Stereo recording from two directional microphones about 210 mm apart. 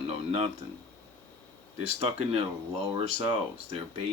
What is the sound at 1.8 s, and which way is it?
Speech, 30° right (ahead or behind).